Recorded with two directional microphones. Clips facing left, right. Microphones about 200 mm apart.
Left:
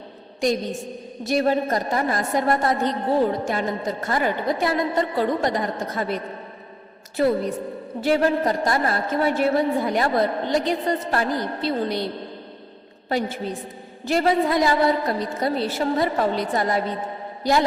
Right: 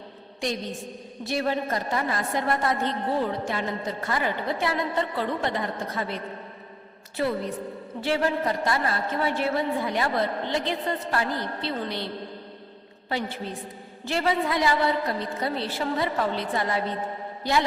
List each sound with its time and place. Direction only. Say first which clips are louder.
1.2 s a woman's voice: left 6 dB; 45° left (ahead or behind)
8.0 s a woman's voice: left 5 dB; 45° left (ahead or behind)